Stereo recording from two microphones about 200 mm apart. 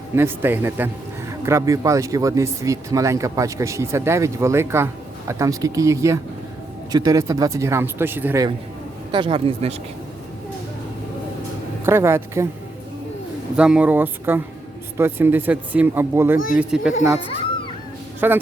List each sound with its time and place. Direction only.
0.2 s speech: 10° right (ahead or behind)
9.1 s a man's voice: 25° right (ahead or behind)
11.9 s speech: 10° right (ahead or behind)
13.6 s speech: 5° right (ahead or behind)
18.2 s speech: 10° right (ahead or behind)